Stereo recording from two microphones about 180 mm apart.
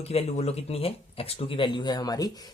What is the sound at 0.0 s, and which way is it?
Speech, 35° left (ahead or behind).